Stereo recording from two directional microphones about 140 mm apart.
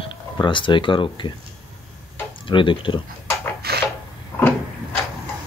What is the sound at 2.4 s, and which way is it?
Speech, 35° left (ahead or behind).